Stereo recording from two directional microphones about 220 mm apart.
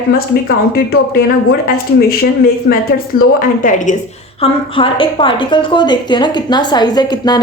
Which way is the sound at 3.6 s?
35° left (ahead or behind).